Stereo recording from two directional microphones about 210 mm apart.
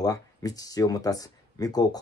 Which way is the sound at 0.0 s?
15° left (ahead or behind).